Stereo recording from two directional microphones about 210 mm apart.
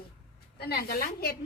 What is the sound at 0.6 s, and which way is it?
Speech, 45° left (ahead or behind).